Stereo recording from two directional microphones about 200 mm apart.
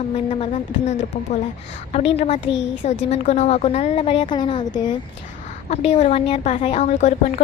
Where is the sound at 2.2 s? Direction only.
35° left (ahead or behind).